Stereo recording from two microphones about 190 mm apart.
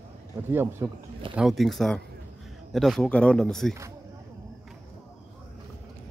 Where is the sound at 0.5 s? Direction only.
10° right (ahead or behind).